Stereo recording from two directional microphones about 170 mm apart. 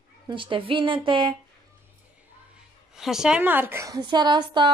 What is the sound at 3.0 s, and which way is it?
A woman's voice, centre (ahead or behind).